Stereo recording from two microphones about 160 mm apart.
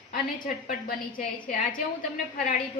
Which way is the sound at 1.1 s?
55° left (ahead or behind).